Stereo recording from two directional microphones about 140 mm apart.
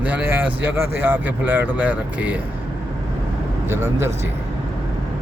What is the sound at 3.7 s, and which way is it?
Speech, 20° right (ahead or behind).